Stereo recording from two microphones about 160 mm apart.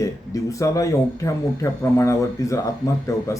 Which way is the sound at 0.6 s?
20° left (ahead or behind).